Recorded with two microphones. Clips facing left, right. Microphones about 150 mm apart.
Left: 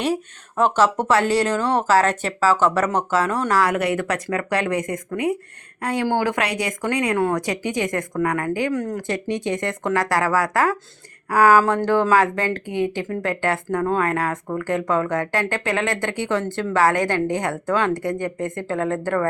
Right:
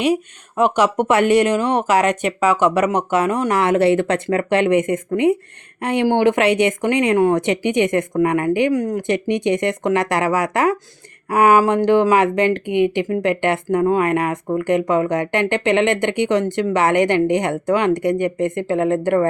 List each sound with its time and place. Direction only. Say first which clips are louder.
0.0 s speech: right 5 dB; 10° right (ahead or behind)